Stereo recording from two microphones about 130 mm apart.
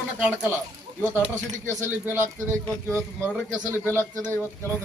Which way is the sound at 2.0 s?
15° right (ahead or behind).